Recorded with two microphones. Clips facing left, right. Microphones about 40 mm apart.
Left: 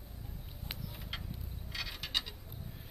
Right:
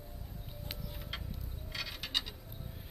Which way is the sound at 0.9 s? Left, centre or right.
Centre.